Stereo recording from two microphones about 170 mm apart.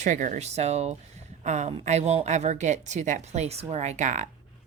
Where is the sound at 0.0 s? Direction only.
50° right (ahead or behind).